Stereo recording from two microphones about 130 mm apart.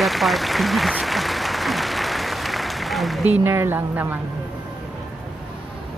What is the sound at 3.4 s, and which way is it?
Speech, 20° right (ahead or behind).